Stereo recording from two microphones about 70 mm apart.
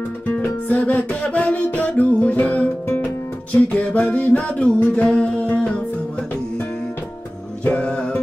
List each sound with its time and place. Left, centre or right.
0.4 s music: centre
7.6 s music: centre